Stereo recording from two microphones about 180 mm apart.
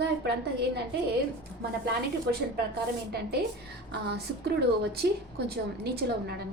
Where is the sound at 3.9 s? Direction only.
65° right (ahead or behind).